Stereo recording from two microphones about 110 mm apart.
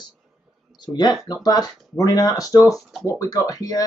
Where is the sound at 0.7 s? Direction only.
40° left (ahead or behind).